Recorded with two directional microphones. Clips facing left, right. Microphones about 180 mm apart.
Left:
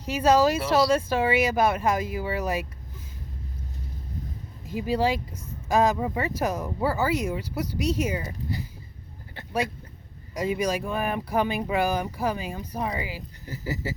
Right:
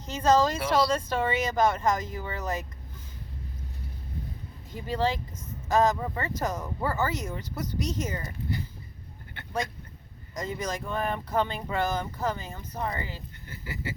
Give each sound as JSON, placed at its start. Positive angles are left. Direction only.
{"t": 0.0, "sound": "speech", "side_deg": 10}
{"t": 4.7, "sound": "speech", "side_deg": 10}
{"t": 10.3, "sound": "speech", "side_deg": 10}
{"t": 13.5, "sound": "a sound", "side_deg": 40}